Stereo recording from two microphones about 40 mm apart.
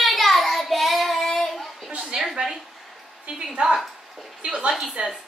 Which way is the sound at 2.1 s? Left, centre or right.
Right.